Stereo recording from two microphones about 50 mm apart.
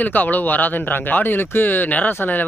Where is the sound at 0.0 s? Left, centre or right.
Left.